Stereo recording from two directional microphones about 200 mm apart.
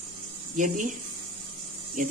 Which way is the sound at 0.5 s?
40° right (ahead or behind).